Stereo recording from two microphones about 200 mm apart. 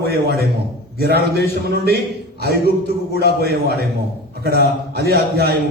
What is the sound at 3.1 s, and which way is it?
A man's voice, 55° right (ahead or behind).